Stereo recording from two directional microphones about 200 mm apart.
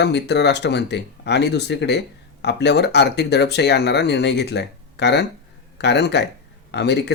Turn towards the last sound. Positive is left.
turn(degrees=60)  # may be behind; listen again after turning